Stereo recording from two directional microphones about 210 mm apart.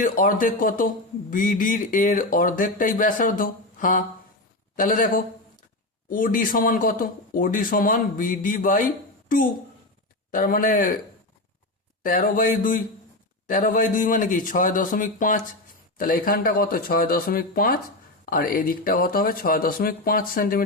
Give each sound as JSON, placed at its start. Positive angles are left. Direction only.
{"t": 0.0, "sound": "a man's voice", "side_deg": 40}
{"t": 12.0, "sound": "a man's voice", "side_deg": 40}